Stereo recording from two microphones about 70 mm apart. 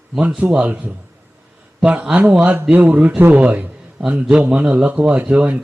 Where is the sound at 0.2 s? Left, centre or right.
Centre.